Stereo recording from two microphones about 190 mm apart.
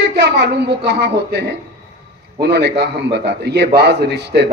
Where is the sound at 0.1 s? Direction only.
60° right (ahead or behind).